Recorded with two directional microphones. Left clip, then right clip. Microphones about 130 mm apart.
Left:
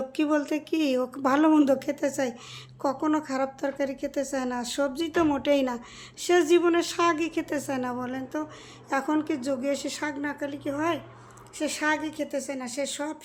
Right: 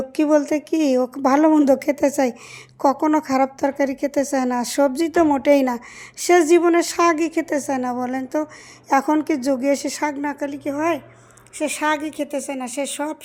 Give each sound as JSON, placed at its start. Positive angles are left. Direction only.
{"t": 0.2, "sound": "a woman's voice", "side_deg": -35}